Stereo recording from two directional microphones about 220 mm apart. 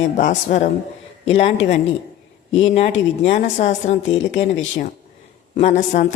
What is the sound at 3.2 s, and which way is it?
Speech, 30° left (ahead or behind).